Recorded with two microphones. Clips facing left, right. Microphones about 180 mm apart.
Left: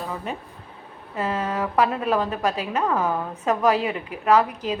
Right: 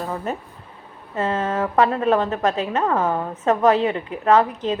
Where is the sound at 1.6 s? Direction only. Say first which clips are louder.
Right 3 dB; 40° right (ahead or behind).